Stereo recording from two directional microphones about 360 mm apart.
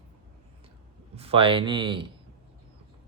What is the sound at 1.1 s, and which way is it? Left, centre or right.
Speech, centre.